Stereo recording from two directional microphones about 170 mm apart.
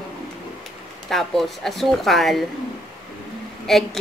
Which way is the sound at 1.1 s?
Centre (ahead or behind).